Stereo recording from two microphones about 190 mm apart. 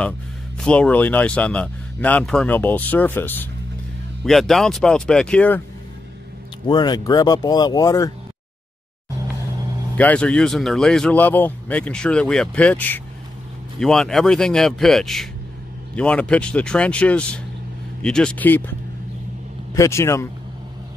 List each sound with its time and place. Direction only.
0.6 s speech: 5° left (ahead or behind)
6.7 s speech: 20° left (ahead or behind)
9.9 s speech: 5° left (ahead or behind)